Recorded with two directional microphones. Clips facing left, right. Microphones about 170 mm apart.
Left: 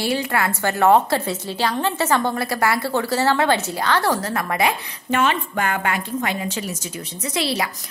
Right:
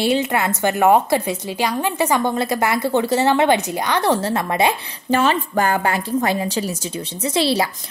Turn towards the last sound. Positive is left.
turn(degrees=-30)  # may be behind; listen again after turning